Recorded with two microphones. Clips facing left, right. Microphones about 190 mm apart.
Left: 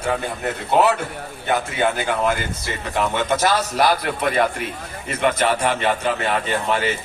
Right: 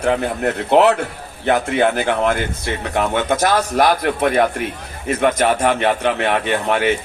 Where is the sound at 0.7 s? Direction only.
65° right (ahead or behind).